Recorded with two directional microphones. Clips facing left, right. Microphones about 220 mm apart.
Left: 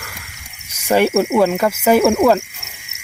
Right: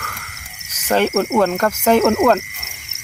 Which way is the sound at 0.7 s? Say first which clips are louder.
Left 2 dB; 10° left (ahead or behind).